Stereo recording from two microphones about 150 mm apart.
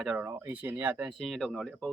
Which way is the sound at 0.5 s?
10° right (ahead or behind).